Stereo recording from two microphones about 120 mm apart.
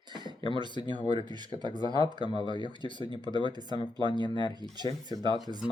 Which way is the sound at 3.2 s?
40° right (ahead or behind).